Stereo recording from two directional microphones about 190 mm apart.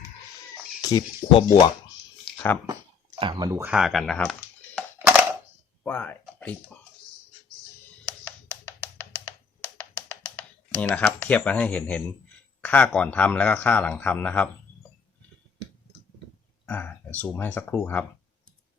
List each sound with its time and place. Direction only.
0.8 s speech: 20° left (ahead or behind)
2.3 s a sound: 10° left (ahead or behind)
3.2 s speech: 25° right (ahead or behind)
3.7 s speech: centre (ahead or behind)
4.9 s a sound: 10° right (ahead or behind)
5.8 s speech: 10° left (ahead or behind)
10.8 s speech: 5° left (ahead or behind)
16.6 s speech: 10° left (ahead or behind)